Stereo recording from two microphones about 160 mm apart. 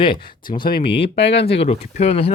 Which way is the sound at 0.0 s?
30° left (ahead or behind).